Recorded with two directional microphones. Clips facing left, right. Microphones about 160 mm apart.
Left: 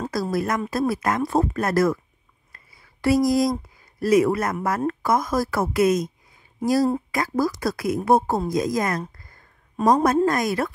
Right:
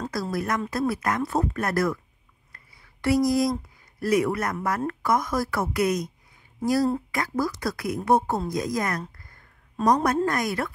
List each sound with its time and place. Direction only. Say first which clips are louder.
0.3 s speech: left 3 dB; 25° left (ahead or behind)
2.5 s a sound: left 1 dB; 25° left (ahead or behind)
4.0 s speech: left 5 dB; 25° left (ahead or behind)